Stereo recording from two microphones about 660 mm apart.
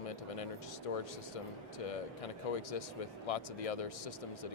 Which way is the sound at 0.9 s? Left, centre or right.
Left.